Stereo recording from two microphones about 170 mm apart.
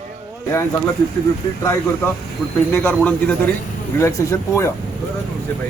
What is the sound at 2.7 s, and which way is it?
Speech, 10° left (ahead or behind).